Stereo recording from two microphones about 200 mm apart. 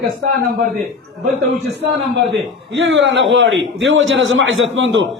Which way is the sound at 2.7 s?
65° right (ahead or behind).